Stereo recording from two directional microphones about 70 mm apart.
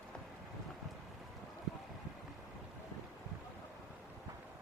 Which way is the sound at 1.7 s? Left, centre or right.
Centre.